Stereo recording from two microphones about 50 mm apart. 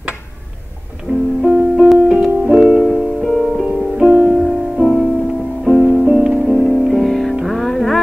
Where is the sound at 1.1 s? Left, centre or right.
Right.